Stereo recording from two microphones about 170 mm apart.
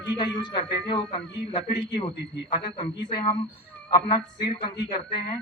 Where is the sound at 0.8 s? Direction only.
25° left (ahead or behind).